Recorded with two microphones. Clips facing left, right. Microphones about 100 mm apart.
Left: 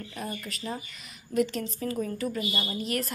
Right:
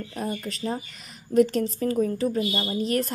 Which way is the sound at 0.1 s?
40° right (ahead or behind).